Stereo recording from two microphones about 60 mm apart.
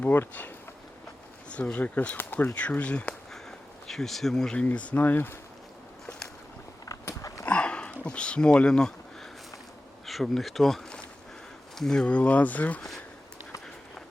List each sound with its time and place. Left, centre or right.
1.5 s speech: left
3.8 s speech: centre
4.5 s speech: left
7.1 s dog: left
7.4 s a sound: left
10.1 s speech: centre
12.0 s speech: left